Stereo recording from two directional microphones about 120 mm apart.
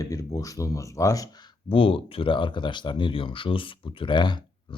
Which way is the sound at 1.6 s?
50° left (ahead or behind).